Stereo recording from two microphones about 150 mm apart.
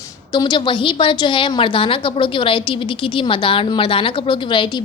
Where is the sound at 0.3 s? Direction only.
30° left (ahead or behind).